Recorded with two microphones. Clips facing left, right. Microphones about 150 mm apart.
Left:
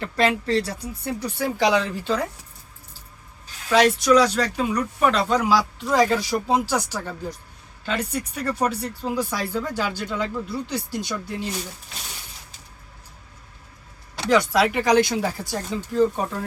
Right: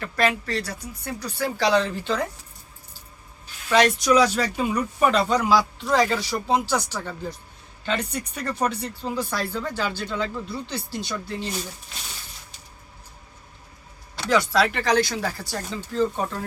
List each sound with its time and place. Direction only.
0.0 s speech: 25° left (ahead or behind)
1.4 s speech: 15° left (ahead or behind)
3.7 s speech: centre (ahead or behind)
14.3 s speech: 15° left (ahead or behind)
15.7 s speech: 10° left (ahead or behind)